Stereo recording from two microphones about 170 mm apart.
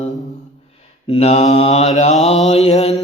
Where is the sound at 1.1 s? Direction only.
35° left (ahead or behind).